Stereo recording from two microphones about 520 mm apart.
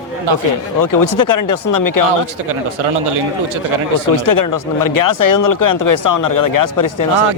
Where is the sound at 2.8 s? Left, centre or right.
Right.